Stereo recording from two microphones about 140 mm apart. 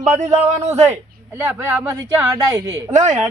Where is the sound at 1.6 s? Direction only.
20° right (ahead or behind).